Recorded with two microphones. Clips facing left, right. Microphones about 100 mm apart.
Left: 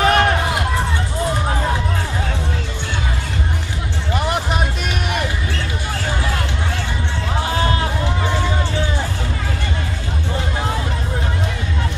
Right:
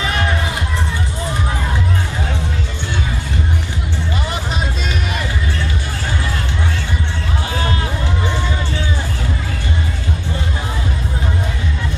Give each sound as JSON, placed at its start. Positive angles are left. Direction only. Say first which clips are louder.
{"t": 0.0, "sound": "run", "louder": "left 5 dB", "side_deg": 55}